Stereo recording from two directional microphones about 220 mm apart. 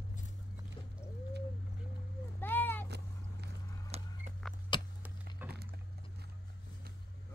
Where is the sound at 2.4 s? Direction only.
10° left (ahead or behind).